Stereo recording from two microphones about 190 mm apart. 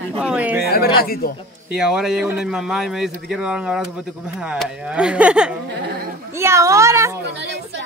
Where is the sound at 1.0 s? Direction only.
55° left (ahead or behind).